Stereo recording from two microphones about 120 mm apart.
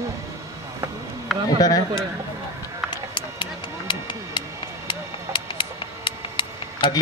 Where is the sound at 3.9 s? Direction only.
45° left (ahead or behind).